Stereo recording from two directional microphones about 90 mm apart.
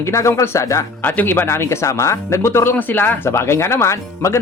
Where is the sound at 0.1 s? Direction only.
30° left (ahead or behind).